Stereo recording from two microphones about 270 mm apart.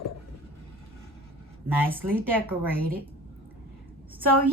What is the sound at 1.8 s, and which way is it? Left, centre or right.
Speech, centre.